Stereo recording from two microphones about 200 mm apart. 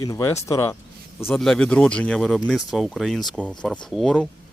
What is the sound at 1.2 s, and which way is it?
Speech, centre (ahead or behind).